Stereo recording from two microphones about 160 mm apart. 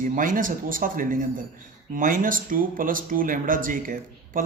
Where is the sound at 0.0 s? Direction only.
55° right (ahead or behind).